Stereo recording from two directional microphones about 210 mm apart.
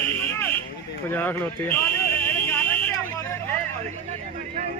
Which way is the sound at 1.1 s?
10° left (ahead or behind).